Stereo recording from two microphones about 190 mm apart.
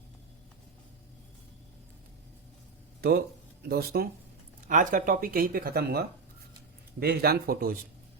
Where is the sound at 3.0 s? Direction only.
55° right (ahead or behind).